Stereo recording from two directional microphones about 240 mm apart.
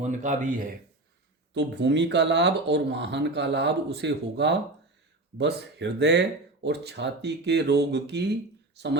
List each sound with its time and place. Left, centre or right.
0.0 s speech: right
1.5 s speech: right